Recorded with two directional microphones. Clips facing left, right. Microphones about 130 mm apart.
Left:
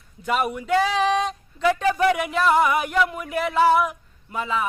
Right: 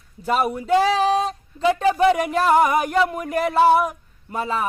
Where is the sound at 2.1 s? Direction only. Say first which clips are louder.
Right 2 dB; 40° right (ahead or behind).